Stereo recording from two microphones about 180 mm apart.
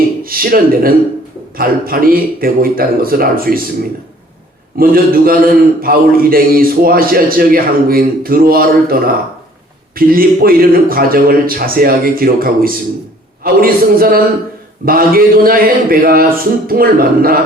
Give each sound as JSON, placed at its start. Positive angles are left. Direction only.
{"t": 0.2, "sound": "a man's voice", "side_deg": -55}
{"t": 4.8, "sound": "a man's voice", "side_deg": -55}